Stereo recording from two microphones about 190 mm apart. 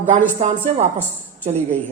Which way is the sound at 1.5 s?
10° left (ahead or behind).